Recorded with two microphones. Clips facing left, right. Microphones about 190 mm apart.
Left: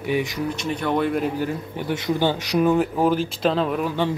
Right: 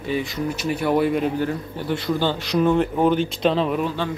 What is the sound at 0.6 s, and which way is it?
Speech, 5° right (ahead or behind).